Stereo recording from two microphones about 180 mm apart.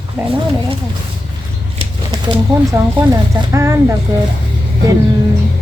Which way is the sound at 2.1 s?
20° right (ahead or behind).